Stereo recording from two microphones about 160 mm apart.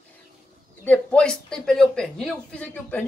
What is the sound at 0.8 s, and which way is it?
Speech, 10° left (ahead or behind).